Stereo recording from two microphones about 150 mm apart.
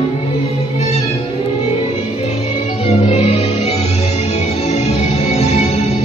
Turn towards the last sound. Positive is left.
turn(degrees=45)  # may be behind; listen again after turning